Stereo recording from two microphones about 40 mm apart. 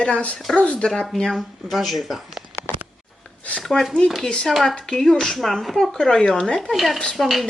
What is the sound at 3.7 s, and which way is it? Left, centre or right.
Speech, centre.